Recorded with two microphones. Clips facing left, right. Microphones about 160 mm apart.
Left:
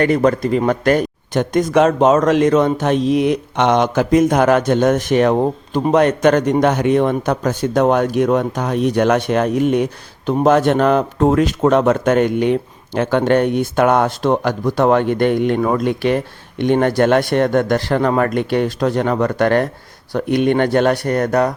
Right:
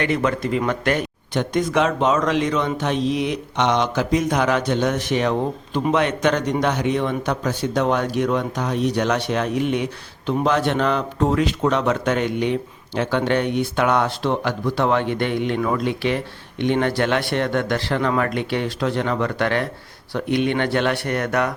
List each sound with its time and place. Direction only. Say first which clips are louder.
0.0 s speech: left 7 dB; 40° left (ahead or behind)